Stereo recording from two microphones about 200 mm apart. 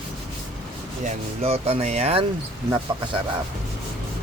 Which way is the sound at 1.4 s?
30° right (ahead or behind).